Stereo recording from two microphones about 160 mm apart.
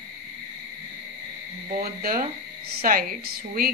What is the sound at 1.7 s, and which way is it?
A woman's voice, 65° right (ahead or behind).